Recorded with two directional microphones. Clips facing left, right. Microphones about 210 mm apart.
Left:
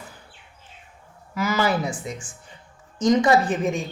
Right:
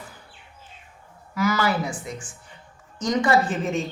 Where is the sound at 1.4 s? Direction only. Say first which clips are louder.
Right 1 dB; 25° left (ahead or behind).